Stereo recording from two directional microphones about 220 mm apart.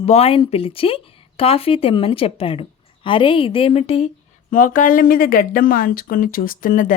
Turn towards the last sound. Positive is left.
turn(degrees=35)  # may be behind; listen again after turning